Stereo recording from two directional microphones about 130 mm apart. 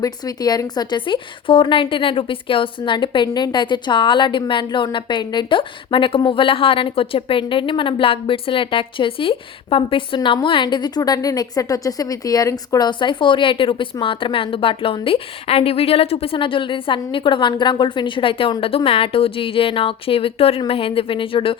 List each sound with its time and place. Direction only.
0.0 s a woman's voice: 30° left (ahead or behind)